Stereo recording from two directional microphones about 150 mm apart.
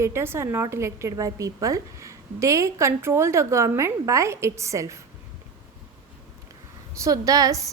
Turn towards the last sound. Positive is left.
turn(degrees=-25)  # may be behind; listen again after turning